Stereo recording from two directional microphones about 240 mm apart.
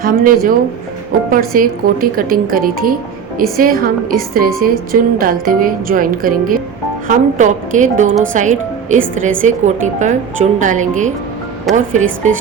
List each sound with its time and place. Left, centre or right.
0.0 s a woman's voice: right
11.7 s speech: centre
12.2 s speech: right